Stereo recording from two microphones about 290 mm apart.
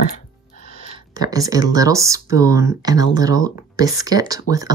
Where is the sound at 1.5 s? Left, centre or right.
Centre.